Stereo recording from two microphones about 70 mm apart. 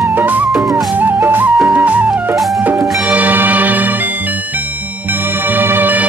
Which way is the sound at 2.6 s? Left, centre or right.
Right.